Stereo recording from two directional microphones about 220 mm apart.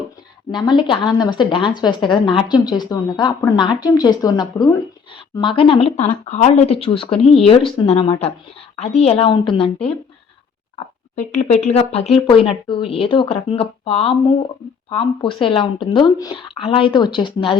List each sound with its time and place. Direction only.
0.5 s speech: 20° left (ahead or behind)
11.1 s speech: 30° left (ahead or behind)